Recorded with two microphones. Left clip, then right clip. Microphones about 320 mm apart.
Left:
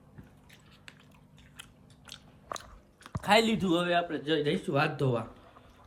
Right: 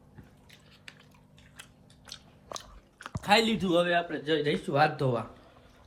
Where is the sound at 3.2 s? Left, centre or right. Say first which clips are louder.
Even; centre.